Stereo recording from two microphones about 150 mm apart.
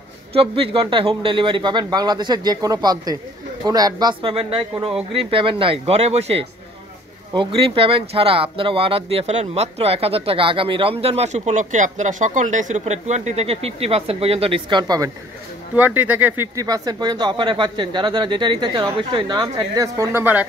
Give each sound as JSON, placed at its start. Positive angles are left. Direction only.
{"t": 0.3, "sound": "speech", "side_deg": -40}
{"t": 15.7, "sound": "speech", "side_deg": -10}
{"t": 16.5, "sound": "speech", "side_deg": -25}